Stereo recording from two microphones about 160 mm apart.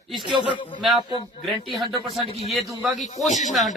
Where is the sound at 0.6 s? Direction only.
30° left (ahead or behind).